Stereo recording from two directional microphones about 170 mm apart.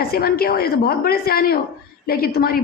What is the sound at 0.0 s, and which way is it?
A woman's voice, 65° left (ahead or behind).